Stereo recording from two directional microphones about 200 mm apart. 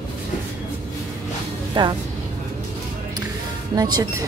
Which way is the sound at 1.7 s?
20° right (ahead or behind).